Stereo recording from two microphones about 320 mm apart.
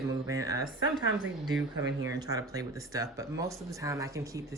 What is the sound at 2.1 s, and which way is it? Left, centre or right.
A woman's voice, centre.